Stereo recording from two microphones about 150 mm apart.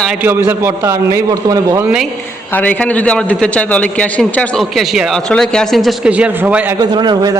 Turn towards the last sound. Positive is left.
turn(degrees=-25)  # may be behind; listen again after turning